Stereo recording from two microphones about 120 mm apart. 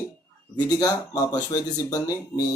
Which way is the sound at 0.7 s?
35° left (ahead or behind).